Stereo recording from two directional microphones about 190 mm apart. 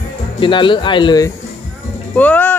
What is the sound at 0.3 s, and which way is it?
Speech, 25° left (ahead or behind).